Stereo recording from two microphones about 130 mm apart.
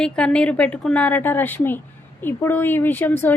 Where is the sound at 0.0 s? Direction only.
10° left (ahead or behind).